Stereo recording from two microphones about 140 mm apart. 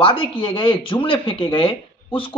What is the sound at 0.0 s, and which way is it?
Speech, 40° left (ahead or behind).